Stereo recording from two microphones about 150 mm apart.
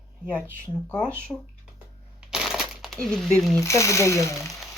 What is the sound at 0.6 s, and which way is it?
Speech, 5° left (ahead or behind).